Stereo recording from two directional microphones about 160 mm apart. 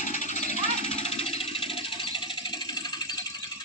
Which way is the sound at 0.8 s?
40° left (ahead or behind).